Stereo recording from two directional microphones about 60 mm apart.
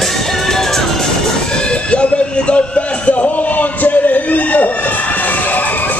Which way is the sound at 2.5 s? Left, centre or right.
Left.